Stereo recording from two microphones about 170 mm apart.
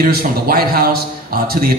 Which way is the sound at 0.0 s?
60° right (ahead or behind).